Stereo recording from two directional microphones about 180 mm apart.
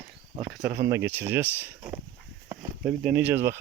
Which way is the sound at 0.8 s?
15° right (ahead or behind).